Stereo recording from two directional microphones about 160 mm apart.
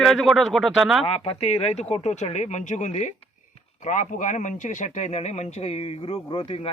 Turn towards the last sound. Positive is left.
turn(degrees=35)  # may be behind; listen again after turning